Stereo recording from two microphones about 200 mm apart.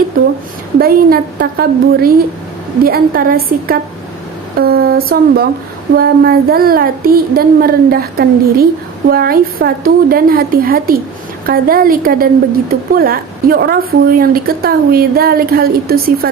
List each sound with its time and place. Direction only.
0.8 s a woman's voice: 50° right (ahead or behind)